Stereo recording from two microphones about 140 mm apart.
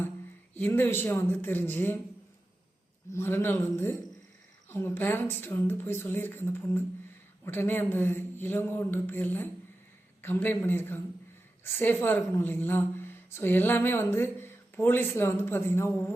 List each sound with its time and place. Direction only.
0.5 s a woman's voice: 15° left (ahead or behind)
3.1 s a woman's voice: 20° left (ahead or behind)